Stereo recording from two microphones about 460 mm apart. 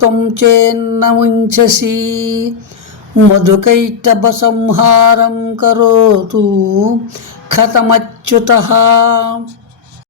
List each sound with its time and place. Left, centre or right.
0.0 s speech: right